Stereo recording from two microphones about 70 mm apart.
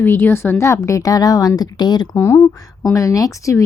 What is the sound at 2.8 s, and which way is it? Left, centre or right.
Speech, left.